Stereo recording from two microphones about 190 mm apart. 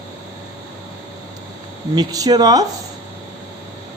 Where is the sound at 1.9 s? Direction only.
20° right (ahead or behind).